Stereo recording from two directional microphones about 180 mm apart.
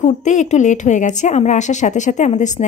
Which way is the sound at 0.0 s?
40° left (ahead or behind).